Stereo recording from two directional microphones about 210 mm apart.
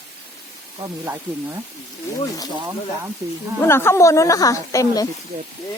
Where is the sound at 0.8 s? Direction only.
15° right (ahead or behind).